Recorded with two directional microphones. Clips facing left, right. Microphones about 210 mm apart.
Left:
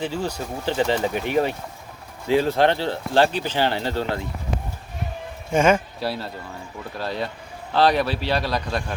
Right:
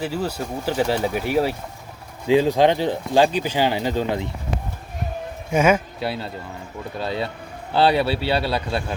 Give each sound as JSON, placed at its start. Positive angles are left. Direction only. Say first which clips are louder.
{"t": 0.0, "sound": "speech", "louder": "right 1 dB", "side_deg": -5}
{"t": 5.5, "sound": "speech", "louder": "even", "side_deg": -10}
{"t": 8.4, "sound": "speech", "louder": "right 2 dB", "side_deg": -30}